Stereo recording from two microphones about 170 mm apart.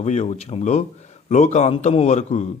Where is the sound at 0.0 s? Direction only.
40° left (ahead or behind).